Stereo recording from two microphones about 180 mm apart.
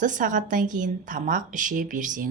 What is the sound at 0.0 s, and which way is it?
A woman's voice, 45° right (ahead or behind).